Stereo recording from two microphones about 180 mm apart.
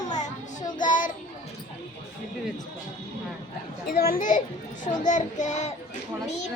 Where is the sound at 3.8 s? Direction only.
60° left (ahead or behind).